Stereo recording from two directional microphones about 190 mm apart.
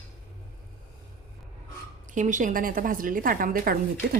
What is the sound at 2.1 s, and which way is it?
A woman's voice, 40° right (ahead or behind).